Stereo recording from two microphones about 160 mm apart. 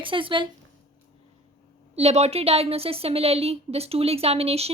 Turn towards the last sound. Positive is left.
turn(degrees=-40)  # may be behind; listen again after turning